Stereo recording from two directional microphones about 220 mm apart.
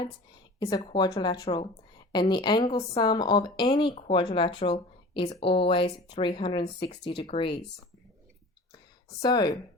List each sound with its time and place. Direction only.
0.6 s speech: 25° left (ahead or behind)
9.2 s speech: 20° left (ahead or behind)